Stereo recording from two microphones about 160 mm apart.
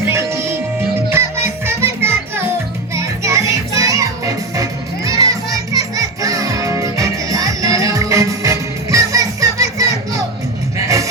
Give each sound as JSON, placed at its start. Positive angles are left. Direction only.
{"t": 0.1, "sound": "music", "side_deg": -15}